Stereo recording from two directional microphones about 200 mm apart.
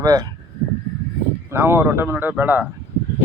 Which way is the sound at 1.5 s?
10° right (ahead or behind).